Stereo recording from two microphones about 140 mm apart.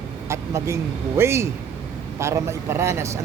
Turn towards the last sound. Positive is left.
turn(degrees=-20)  # may be behind; listen again after turning